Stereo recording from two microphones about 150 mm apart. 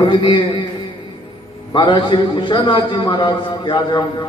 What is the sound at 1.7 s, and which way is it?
A man's voice, 30° left (ahead or behind).